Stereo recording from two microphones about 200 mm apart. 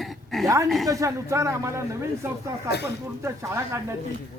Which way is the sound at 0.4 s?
15° right (ahead or behind).